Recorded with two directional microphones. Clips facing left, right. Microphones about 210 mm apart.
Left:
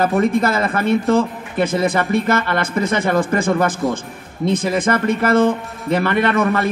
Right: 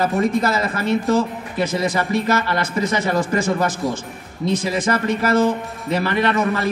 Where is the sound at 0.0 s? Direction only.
55° left (ahead or behind).